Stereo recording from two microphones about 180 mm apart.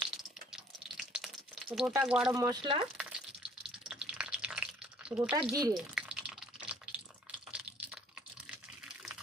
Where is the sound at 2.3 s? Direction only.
20° right (ahead or behind).